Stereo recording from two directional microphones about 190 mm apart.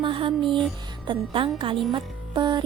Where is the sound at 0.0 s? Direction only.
25° right (ahead or behind).